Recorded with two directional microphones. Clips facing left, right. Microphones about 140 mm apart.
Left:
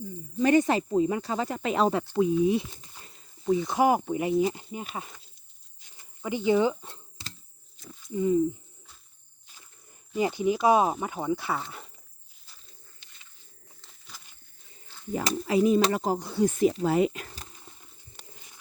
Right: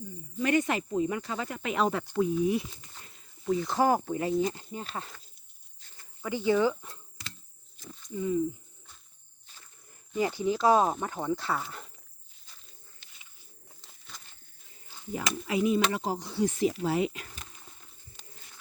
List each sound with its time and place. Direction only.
0.3 s speech: 35° left (ahead or behind); by 5.2 s 10° left (ahead or behind)
5.8 s a sound: 20° left (ahead or behind)
8.1 s speech: 25° left (ahead or behind)
10.2 s speech: 20° left (ahead or behind); by 11.9 s centre (ahead or behind)
15.1 s speech: 35° left (ahead or behind)
18.2 s a sound: 65° left (ahead or behind)